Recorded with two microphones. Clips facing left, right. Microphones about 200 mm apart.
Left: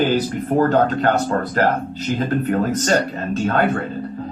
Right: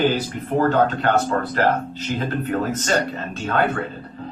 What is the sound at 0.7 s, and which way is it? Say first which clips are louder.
A man's voice: left 2 dB; 40° left (ahead or behind).